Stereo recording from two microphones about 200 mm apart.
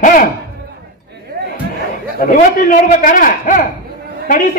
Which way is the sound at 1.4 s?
50° right (ahead or behind).